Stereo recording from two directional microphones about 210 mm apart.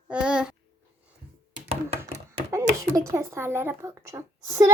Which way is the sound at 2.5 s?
15° right (ahead or behind).